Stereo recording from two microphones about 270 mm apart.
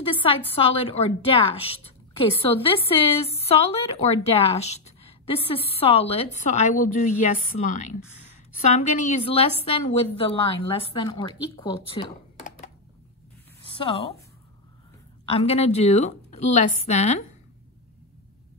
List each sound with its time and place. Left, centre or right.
0.1 s a woman's voice: centre
15.2 s a woman's voice: left